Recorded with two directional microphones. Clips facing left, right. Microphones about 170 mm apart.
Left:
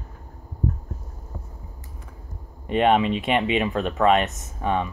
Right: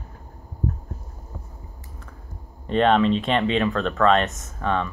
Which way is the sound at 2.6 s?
10° left (ahead or behind).